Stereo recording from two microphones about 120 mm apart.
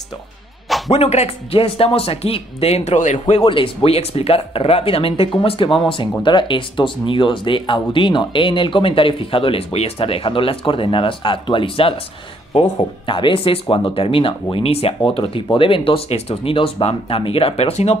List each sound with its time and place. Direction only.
0.9 s speech: 60° left (ahead or behind); by 3.4 s 80° left
3.4 s speech: 45° left (ahead or behind)